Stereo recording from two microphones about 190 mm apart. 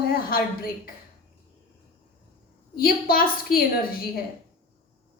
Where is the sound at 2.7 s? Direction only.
50° left (ahead or behind).